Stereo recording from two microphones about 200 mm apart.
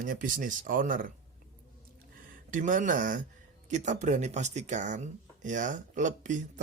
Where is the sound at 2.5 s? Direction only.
40° right (ahead or behind).